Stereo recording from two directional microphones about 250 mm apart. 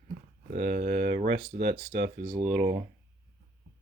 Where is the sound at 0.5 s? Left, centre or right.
Right.